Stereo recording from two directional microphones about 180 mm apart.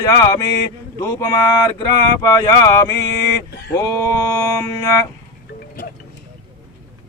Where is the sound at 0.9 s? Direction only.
15° left (ahead or behind).